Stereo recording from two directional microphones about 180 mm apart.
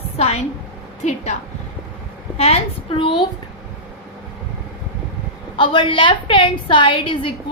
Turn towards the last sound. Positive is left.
turn(degrees=30)  # may be behind; listen again after turning